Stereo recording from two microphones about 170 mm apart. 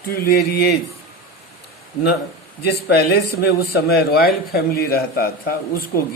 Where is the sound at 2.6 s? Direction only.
70° left (ahead or behind).